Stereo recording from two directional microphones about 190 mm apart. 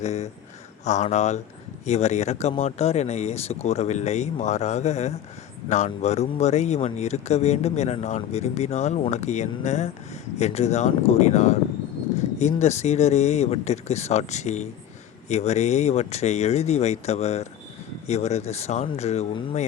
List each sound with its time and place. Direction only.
0.0 s speech: 35° left (ahead or behind)